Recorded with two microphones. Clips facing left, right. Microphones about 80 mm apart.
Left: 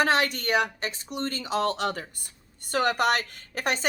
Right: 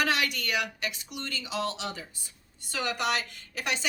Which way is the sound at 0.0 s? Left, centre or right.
Left.